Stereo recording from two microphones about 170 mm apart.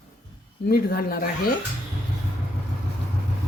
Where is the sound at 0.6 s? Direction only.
60° left (ahead or behind).